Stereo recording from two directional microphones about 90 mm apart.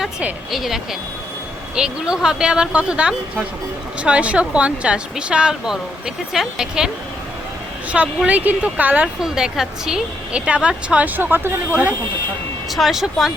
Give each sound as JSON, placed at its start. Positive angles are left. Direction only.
{"t": 0.5, "sound": "a woman's voice", "side_deg": -5}
{"t": 7.9, "sound": "a woman's voice", "side_deg": -15}
{"t": 9.3, "sound": "a woman's voice", "side_deg": -5}
{"t": 12.7, "sound": "speech", "side_deg": -5}